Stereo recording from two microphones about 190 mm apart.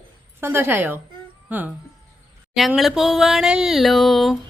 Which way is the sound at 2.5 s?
Centre (ahead or behind).